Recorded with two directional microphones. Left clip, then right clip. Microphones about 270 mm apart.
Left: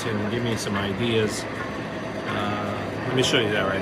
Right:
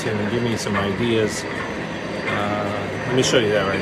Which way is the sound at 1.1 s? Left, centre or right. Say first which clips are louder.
Right 2 dB; centre.